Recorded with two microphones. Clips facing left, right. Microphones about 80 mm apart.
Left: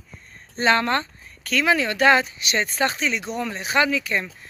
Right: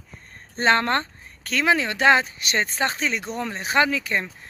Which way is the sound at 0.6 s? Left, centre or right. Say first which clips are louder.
Even; right.